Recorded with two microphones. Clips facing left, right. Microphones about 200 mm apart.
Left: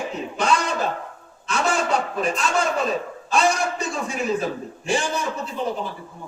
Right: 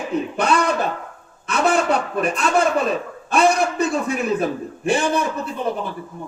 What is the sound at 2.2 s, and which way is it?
A man's voice, 55° right (ahead or behind).